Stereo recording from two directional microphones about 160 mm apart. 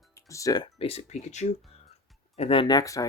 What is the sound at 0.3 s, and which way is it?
Speech, 20° left (ahead or behind).